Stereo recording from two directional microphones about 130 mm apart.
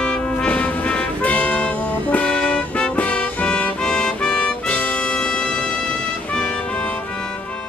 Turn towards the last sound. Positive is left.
turn(degrees=10)  # may be behind; listen again after turning